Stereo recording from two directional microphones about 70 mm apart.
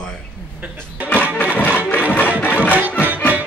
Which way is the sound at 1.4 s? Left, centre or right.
Left.